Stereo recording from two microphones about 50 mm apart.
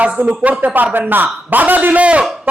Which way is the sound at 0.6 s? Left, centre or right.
Right.